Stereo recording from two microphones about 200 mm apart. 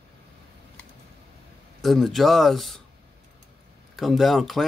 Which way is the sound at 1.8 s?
Centre (ahead or behind).